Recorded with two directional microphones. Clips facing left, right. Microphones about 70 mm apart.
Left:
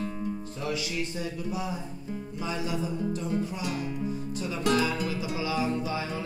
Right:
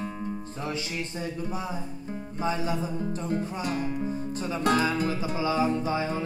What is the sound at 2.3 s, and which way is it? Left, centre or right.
Music, right.